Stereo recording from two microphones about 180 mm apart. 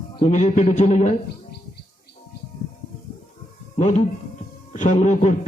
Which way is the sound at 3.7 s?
40° left (ahead or behind).